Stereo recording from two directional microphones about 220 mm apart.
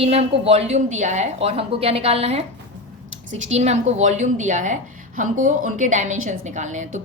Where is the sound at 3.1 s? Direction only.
60° right (ahead or behind).